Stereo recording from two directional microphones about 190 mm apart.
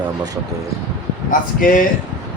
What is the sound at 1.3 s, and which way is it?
Speech, 45° left (ahead or behind).